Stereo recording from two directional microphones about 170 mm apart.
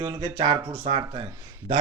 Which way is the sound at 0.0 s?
25° right (ahead or behind).